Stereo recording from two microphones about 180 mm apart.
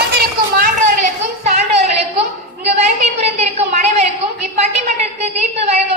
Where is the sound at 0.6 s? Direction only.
45° right (ahead or behind).